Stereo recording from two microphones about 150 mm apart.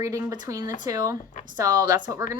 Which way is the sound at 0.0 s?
25° right (ahead or behind).